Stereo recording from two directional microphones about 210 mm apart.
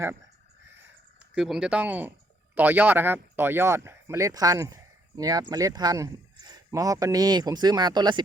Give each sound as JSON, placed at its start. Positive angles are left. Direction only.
{"t": 1.3, "sound": "speech", "side_deg": -5}